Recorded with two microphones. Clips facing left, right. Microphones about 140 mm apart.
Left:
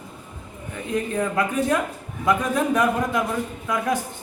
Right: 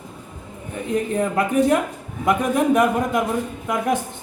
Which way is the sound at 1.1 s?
20° right (ahead or behind).